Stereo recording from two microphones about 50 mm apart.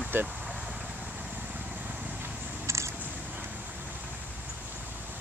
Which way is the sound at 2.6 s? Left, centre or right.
Right.